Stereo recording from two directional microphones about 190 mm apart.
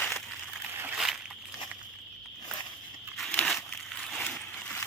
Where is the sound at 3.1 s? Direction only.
5° left (ahead or behind).